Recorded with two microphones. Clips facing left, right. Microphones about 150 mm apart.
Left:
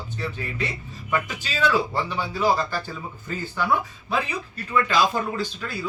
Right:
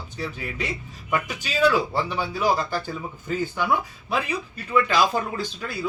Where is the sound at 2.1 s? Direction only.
15° right (ahead or behind).